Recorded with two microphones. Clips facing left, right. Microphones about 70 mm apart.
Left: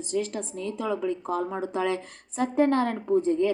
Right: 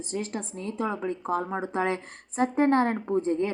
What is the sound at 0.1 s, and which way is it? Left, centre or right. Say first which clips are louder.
A woman's voice: left 4 dB; right.